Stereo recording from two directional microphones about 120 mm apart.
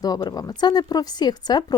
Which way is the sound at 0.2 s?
35° left (ahead or behind).